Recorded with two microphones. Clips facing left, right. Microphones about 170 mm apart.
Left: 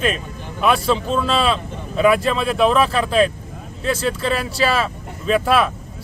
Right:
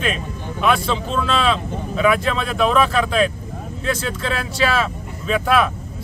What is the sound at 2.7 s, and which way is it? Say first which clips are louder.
Speech: left 1 dB; 35° left (ahead or behind).